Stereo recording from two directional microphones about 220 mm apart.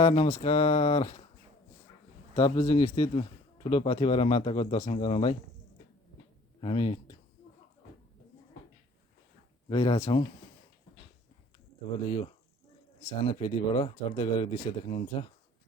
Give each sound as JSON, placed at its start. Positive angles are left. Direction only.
{"t": 0.0, "sound": "speech", "side_deg": 25}
{"t": 2.3, "sound": "speech", "side_deg": 20}
{"t": 6.6, "sound": "speech", "side_deg": 25}
{"t": 9.6, "sound": "speech", "side_deg": 20}
{"t": 13.2, "sound": "speech", "side_deg": 25}